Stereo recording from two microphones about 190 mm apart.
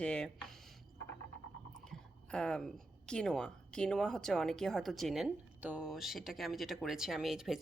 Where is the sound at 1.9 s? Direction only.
5° left (ahead or behind).